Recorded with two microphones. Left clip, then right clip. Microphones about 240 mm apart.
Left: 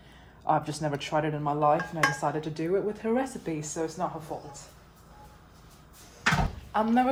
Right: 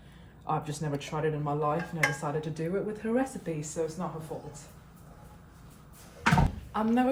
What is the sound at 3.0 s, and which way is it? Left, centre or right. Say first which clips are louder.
Speech: left 2 dB; left.